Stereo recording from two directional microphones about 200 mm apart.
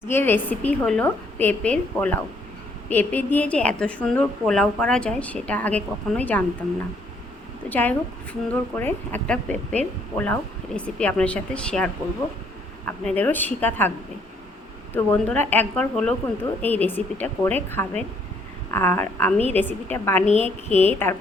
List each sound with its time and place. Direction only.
0.1 s a woman's voice: 10° left (ahead or behind)
7.7 s a woman's voice: 10° left (ahead or behind)
14.9 s a woman's voice: 10° left (ahead or behind)
20.2 s a woman's voice: 35° left (ahead or behind)
20.7 s a woman's voice: 10° left (ahead or behind)